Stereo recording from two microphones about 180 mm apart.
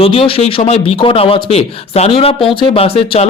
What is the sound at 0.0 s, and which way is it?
Speech, 30° left (ahead or behind).